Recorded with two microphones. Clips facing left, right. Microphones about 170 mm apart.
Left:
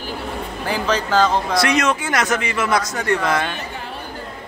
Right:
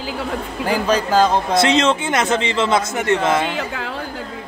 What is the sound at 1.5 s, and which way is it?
Speech, 25° right (ahead or behind).